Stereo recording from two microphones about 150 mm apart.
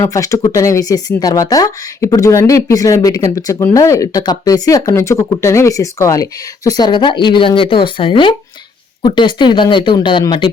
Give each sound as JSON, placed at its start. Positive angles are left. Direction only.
{"t": 0.0, "sound": "speech", "side_deg": 20}